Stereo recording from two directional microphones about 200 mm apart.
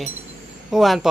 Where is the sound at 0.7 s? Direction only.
Centre (ahead or behind).